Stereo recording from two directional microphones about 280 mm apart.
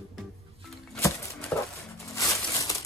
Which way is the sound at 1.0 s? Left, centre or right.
Centre.